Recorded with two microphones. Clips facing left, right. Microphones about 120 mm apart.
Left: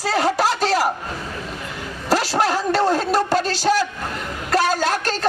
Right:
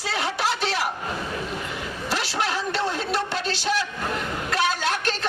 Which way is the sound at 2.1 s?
40° left (ahead or behind).